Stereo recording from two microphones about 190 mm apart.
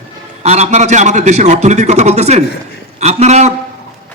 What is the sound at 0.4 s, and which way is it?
A man's voice, 35° right (ahead or behind).